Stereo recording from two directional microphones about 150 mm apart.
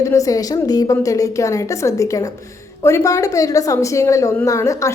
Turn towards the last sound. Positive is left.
turn(degrees=20)  # may be behind; listen again after turning